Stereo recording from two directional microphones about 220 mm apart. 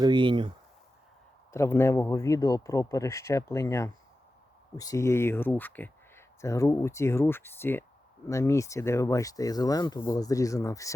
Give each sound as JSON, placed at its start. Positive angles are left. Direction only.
{"t": 0.0, "sound": "speech", "side_deg": -20}
{"t": 1.5, "sound": "speech", "side_deg": 10}